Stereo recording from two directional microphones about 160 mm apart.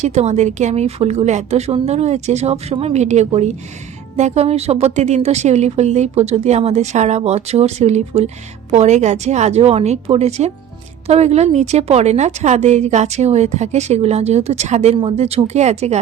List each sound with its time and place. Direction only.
0.0 s a woman's voice: 45° right (ahead or behind)